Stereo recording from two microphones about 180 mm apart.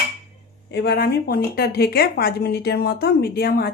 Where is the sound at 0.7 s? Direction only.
70° left (ahead or behind).